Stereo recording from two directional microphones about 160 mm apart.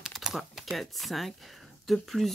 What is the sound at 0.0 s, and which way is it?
Speech, centre (ahead or behind).